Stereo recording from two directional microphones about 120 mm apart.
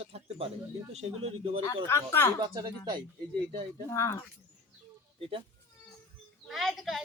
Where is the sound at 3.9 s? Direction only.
25° left (ahead or behind).